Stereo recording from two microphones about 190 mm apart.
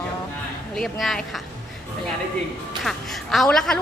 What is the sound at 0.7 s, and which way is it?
Speech, centre (ahead or behind).